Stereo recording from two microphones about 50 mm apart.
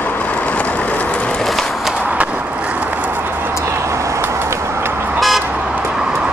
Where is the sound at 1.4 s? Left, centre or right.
Centre.